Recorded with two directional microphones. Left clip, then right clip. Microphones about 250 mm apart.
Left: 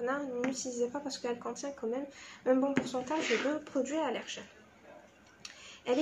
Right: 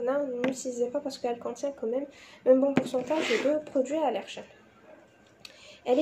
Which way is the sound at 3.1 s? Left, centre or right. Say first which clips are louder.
Right 4 dB; right.